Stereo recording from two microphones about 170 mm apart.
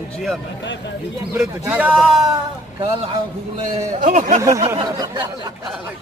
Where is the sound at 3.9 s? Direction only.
50° right (ahead or behind).